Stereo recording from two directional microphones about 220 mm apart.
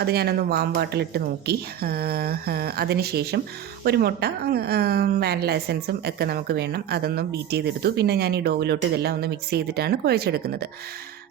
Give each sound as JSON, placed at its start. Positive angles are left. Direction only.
{"t": 0.0, "sound": "a woman's voice", "side_deg": -45}